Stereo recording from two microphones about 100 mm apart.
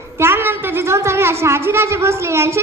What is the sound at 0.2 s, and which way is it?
A woman's voice, 25° right (ahead or behind).